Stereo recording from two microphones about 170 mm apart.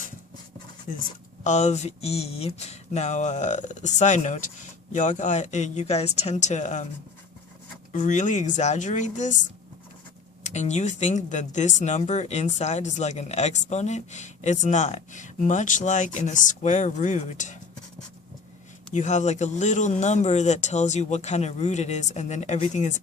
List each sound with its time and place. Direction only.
1.5 s speech: 40° left (ahead or behind)
7.9 s speech: 45° left (ahead or behind)
18.9 s speech: 45° left (ahead or behind)